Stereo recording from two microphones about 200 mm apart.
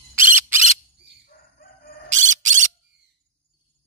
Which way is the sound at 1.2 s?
45° left (ahead or behind).